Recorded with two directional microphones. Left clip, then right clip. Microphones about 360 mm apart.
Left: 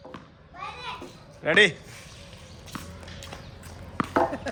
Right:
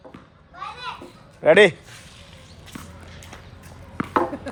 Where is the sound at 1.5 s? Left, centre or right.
Centre.